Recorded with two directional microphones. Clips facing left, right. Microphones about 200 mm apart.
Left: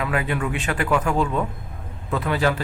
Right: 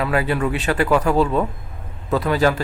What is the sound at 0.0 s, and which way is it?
Speech, 35° right (ahead or behind).